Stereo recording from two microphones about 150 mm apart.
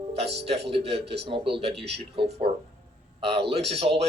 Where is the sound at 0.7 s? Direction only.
40° right (ahead or behind).